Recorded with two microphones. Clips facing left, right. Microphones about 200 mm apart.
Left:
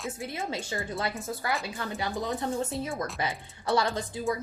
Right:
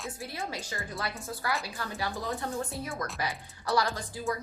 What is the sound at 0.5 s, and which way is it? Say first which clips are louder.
Speech: left 5 dB; 30° left (ahead or behind).